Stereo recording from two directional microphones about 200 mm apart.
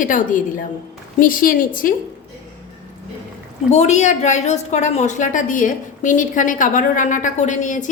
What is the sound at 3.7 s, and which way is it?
A woman's voice, 35° left (ahead or behind).